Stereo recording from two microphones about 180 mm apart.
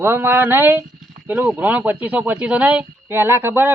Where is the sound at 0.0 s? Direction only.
15° right (ahead or behind).